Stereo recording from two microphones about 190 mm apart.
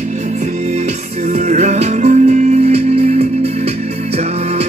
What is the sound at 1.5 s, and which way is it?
Music, 35° right (ahead or behind).